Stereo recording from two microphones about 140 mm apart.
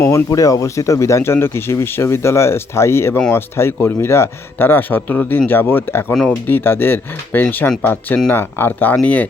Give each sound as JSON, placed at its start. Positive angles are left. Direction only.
{"t": 0.0, "sound": "a man's voice", "side_deg": 20}